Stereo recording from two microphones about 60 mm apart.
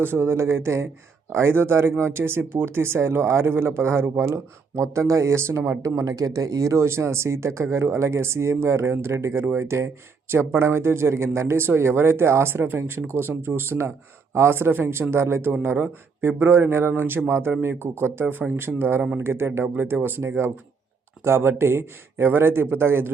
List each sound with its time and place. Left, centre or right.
0.0 s speech: right
4.7 s speech: right
6.0 s speech: right
6.7 s speech: right